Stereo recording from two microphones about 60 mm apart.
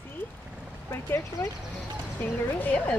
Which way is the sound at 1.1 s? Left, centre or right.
Left.